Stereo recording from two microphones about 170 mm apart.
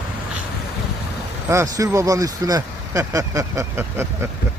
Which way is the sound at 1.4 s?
20° right (ahead or behind).